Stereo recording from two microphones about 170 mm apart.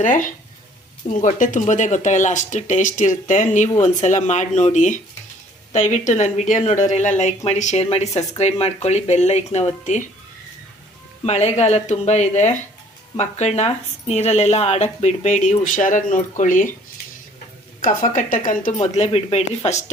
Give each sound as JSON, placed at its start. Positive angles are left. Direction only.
{"t": 0.0, "sound": "speech", "side_deg": 50}
{"t": 11.3, "sound": "speech", "side_deg": 40}
{"t": 17.7, "sound": "speech", "side_deg": 50}